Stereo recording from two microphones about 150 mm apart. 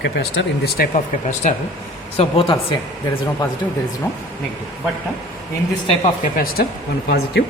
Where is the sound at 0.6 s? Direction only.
90° left.